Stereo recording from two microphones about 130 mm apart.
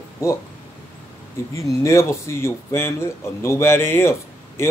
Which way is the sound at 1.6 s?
20° left (ahead or behind).